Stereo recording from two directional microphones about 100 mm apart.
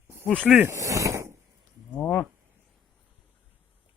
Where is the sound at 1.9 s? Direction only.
15° left (ahead or behind).